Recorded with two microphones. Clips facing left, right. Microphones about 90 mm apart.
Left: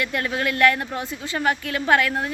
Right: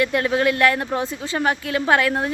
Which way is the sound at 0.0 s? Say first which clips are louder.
Right 6 dB; 25° right (ahead or behind).